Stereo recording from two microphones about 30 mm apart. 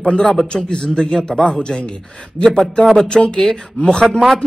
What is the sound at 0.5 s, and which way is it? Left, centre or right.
Speech, left.